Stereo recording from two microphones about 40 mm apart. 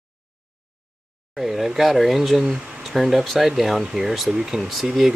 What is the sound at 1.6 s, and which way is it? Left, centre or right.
Speech, centre.